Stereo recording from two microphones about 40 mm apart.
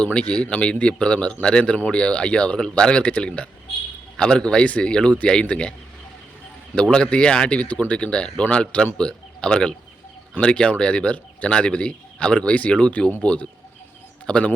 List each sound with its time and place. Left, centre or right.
0.0 s speech: left
3.0 s speech: left
6.9 s speech: left
7.7 s speech: left
7.9 s speech: left